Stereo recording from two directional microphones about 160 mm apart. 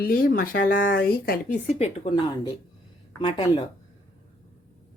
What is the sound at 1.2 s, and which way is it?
Speech, 70° left (ahead or behind).